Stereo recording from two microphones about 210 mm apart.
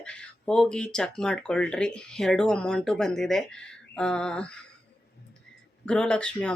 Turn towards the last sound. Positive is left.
turn(degrees=5)  # may be behind; listen again after turning